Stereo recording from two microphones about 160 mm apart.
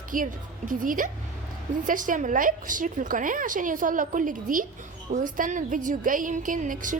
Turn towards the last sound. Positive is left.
turn(degrees=-55)  # may be behind; listen again after turning